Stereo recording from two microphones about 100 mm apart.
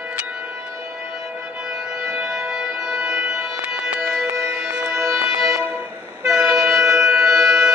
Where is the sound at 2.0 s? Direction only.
5° right (ahead or behind).